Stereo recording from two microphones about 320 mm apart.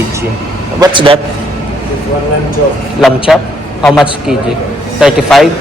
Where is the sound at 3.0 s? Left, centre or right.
Centre.